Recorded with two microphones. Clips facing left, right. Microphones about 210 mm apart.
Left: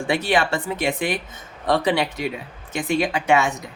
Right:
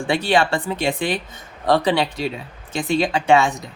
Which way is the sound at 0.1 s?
30° right (ahead or behind).